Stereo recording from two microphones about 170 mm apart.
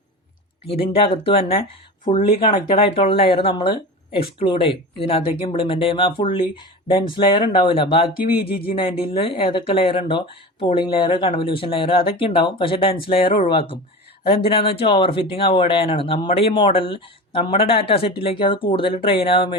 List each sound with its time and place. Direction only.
0.7 s speech: 35° left (ahead or behind)
8.4 s speech: 65° left (ahead or behind)
8.7 s speech: 30° left (ahead or behind)